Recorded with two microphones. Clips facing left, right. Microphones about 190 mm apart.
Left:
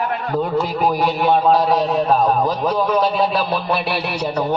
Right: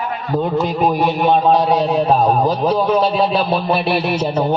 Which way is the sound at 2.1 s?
30° right (ahead or behind).